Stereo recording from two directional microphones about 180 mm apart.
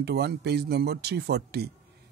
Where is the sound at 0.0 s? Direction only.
65° right (ahead or behind).